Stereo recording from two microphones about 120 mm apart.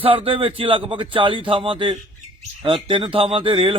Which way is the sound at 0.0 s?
50° right (ahead or behind).